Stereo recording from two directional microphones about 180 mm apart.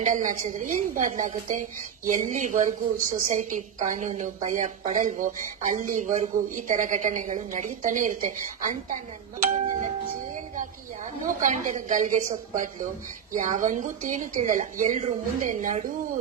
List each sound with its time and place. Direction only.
0.0 s a woman's voice: 45° right (ahead or behind)